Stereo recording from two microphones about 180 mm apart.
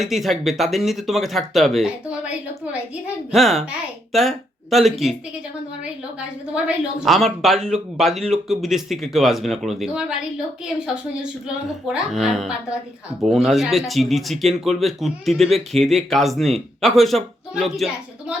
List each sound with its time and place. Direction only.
0.0 s speech: centre (ahead or behind)
6.1 s speech: 5° right (ahead or behind)
11.9 s speech: centre (ahead or behind)